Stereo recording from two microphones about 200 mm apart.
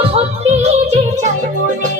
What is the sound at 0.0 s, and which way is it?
Music, 30° right (ahead or behind).